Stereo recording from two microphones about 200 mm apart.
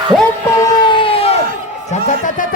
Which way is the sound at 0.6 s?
20° left (ahead or behind).